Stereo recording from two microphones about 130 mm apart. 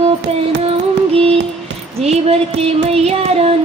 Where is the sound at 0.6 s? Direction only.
50° right (ahead or behind).